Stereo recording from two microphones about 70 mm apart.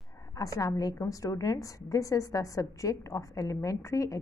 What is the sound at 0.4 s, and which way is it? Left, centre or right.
A woman's voice, left.